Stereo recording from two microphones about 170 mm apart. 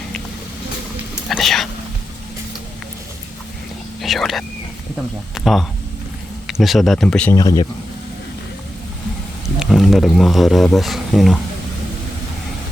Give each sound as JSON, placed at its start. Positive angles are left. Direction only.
{"t": 1.3, "sound": "a sound", "side_deg": 0}
{"t": 4.0, "sound": "whispering", "side_deg": 0}
{"t": 5.3, "sound": "speech", "side_deg": 0}
{"t": 7.3, "sound": "speech", "side_deg": 20}
{"t": 9.6, "sound": "speech", "side_deg": 0}